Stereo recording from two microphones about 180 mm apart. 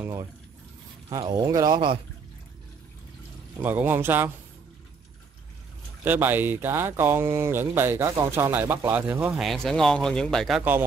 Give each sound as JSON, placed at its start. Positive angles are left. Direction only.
{"t": 1.2, "sound": "speech", "side_deg": -25}
{"t": 3.6, "sound": "speech", "side_deg": -10}
{"t": 6.0, "sound": "speech", "side_deg": -10}
{"t": 10.6, "sound": "speech", "side_deg": -10}